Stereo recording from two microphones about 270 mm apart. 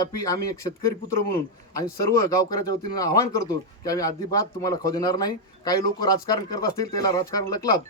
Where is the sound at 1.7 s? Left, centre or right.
Centre.